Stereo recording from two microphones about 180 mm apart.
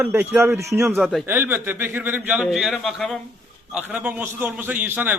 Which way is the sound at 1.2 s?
10° right (ahead or behind).